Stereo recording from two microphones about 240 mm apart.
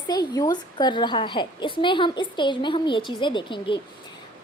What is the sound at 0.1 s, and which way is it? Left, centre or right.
A woman's voice, centre.